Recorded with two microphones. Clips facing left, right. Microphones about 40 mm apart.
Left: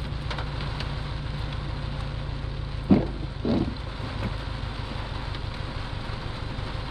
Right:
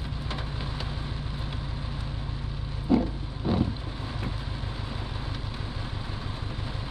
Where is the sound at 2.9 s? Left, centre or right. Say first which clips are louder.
Left 2 dB; left.